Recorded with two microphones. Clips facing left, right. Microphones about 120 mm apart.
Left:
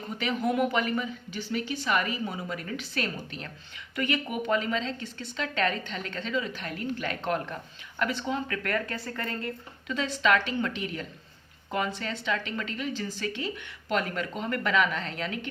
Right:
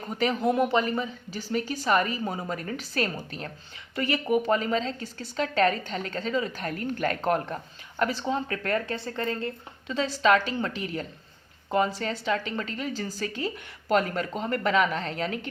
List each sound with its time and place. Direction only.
0.1 s speech: 40° right (ahead or behind)